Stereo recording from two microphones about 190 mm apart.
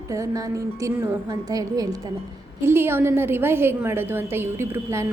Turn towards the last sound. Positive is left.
turn(degrees=-15)  # may be behind; listen again after turning